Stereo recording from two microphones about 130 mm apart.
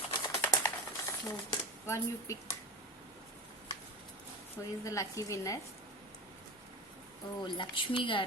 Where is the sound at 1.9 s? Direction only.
25° left (ahead or behind).